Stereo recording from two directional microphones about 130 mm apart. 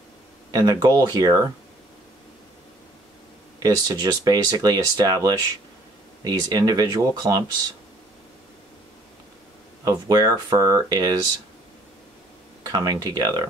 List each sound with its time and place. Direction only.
0.5 s speech: 30° right (ahead or behind)
3.5 s speech: 30° right (ahead or behind)
9.8 s speech: 30° right (ahead or behind)
12.6 s speech: 30° right (ahead or behind)